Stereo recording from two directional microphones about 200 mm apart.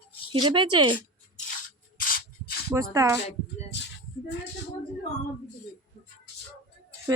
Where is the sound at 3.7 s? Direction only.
60° left (ahead or behind).